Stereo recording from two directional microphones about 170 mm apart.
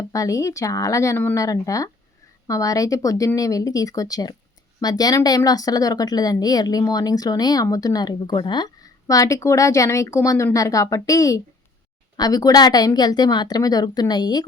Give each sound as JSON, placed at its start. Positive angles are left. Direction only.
{"t": 0.1, "sound": "speech", "side_deg": 20}